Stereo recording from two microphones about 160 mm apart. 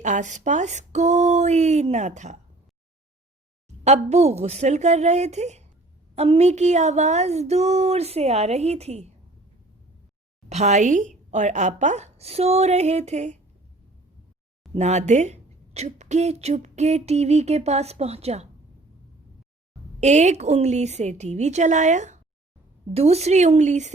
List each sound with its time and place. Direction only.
0.0 s speech: 50° right (ahead or behind)
3.8 s speech: 45° right (ahead or behind)
10.5 s speech: 45° right (ahead or behind)
14.8 s speech: 45° right (ahead or behind)
20.0 s speech: 45° right (ahead or behind)